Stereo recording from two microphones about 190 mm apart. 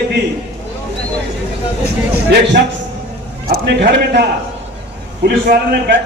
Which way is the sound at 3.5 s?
60° right (ahead or behind).